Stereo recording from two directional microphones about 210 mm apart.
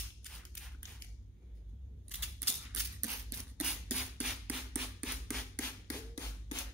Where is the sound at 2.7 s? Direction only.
15° right (ahead or behind); by 5.6 s 5° left (ahead or behind).